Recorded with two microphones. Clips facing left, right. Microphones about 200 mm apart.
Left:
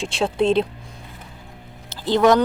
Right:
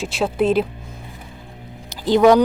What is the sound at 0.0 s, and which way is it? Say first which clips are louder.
Speech: right 1 dB; 5° right (ahead or behind).